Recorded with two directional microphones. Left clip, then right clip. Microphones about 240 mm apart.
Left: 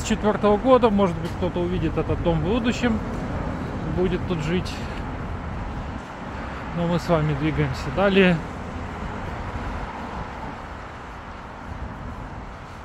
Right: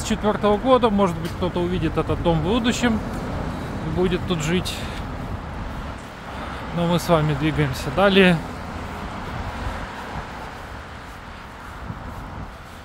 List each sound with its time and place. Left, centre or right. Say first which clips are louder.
0.0 s speech: even; centre
4.0 s speech: right 2 dB; right
6.8 s speech: right 3 dB; centre